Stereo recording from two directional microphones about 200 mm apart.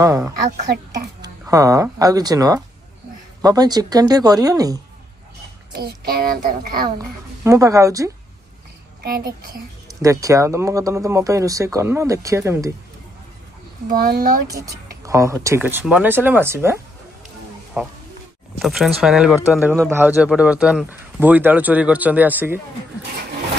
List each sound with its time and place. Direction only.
0.0 s speech: 15° right (ahead or behind)
5.7 s a child's voice: 55° right (ahead or behind)
7.4 s speech: 15° right (ahead or behind)
10.0 s speech: 15° right (ahead or behind)
13.8 s a child's voice: 50° right (ahead or behind)
15.0 s speech: 15° right (ahead or behind)